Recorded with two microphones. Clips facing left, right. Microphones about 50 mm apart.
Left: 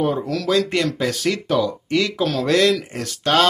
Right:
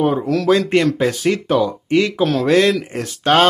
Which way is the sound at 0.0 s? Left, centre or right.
Right.